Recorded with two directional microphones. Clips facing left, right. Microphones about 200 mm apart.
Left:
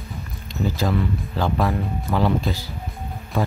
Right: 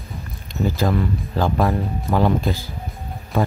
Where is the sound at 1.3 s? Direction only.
50° right (ahead or behind).